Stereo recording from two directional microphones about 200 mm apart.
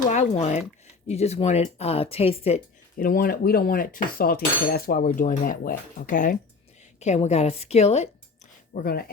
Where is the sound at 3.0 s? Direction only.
45° left (ahead or behind).